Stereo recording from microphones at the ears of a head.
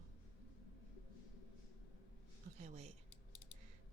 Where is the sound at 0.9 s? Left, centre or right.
Left.